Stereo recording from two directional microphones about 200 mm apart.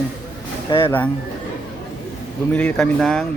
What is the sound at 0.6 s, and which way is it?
Speech, 25° left (ahead or behind).